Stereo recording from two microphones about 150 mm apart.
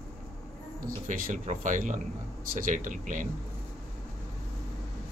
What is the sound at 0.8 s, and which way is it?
Speech, 60° right (ahead or behind).